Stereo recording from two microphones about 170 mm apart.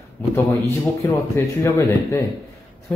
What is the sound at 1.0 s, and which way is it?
A man's voice, 15° left (ahead or behind).